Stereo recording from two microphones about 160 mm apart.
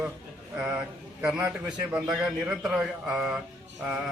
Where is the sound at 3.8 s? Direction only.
10° right (ahead or behind).